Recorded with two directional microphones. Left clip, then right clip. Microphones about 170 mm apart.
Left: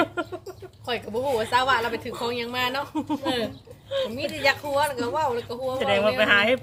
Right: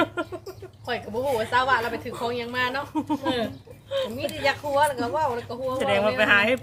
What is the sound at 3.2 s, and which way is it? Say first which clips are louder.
A woman's voice: even; 55° left (ahead or behind).